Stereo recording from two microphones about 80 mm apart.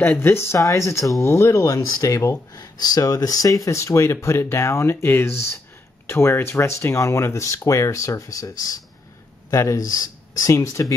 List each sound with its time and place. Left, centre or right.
0.0 s speech: left
2.5 s speech: left